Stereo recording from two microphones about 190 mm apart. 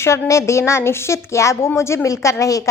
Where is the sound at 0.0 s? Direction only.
15° left (ahead or behind).